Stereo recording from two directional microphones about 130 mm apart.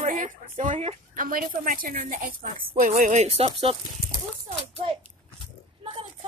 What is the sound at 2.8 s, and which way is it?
Speech, 75° right (ahead or behind).